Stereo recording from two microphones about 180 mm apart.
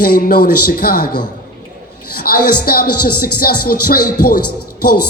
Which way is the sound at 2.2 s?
55° left (ahead or behind).